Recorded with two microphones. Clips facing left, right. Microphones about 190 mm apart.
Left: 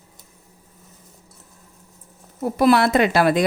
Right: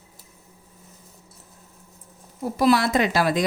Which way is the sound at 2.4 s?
55° left (ahead or behind).